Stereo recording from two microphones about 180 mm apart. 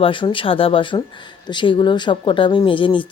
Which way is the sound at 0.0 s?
30° left (ahead or behind).